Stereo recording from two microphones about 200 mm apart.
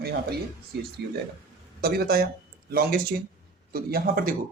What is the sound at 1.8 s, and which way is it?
A man's voice, 50° right (ahead or behind).